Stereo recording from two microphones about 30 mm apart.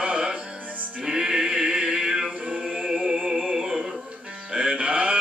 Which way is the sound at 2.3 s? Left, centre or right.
Right.